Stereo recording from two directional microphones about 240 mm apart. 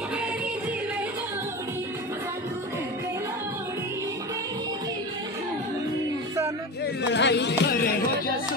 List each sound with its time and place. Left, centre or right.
7.0 s chatter: left